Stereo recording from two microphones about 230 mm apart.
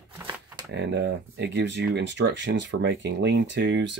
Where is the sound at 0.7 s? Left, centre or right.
Right.